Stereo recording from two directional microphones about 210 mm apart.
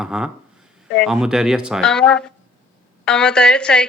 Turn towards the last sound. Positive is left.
turn(degrees=5)  # may be behind; listen again after turning